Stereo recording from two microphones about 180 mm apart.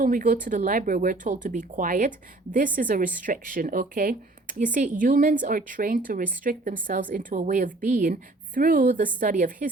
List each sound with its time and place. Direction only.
0.0 s speech: 50° right (ahead or behind)